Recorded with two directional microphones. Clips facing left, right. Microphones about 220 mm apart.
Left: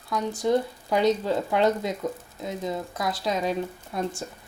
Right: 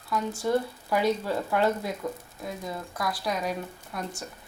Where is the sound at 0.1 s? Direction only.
20° left (ahead or behind).